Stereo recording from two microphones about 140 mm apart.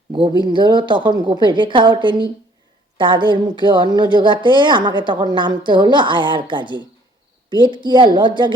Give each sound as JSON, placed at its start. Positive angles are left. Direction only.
{"t": 0.1, "sound": "a woman's voice", "side_deg": -35}